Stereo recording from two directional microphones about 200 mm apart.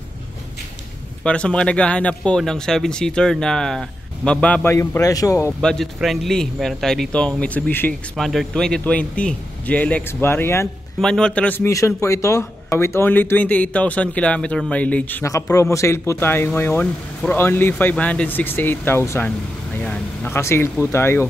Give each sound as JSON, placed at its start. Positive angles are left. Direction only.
{"t": 1.2, "sound": "speech", "side_deg": 5}
{"t": 5.6, "sound": "a man's voice", "side_deg": 0}